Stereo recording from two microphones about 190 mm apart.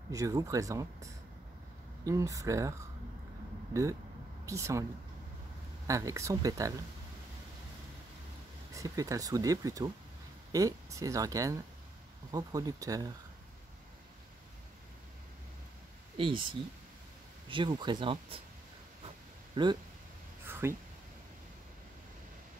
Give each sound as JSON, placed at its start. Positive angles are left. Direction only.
{"t": 0.1, "sound": "speech", "side_deg": -15}
{"t": 4.5, "sound": "speech", "side_deg": -15}
{"t": 5.9, "sound": "speech", "side_deg": -15}
{"t": 8.7, "sound": "speech", "side_deg": -20}
{"t": 16.2, "sound": "speech", "side_deg": -25}
{"t": 19.5, "sound": "speech", "side_deg": -25}
{"t": 20.4, "sound": "a sound", "side_deg": -10}